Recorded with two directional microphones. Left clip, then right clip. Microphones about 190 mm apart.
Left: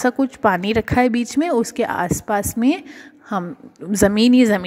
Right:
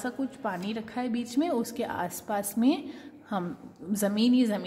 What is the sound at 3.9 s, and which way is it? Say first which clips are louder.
Speech: left 11 dB; 45° left (ahead or behind).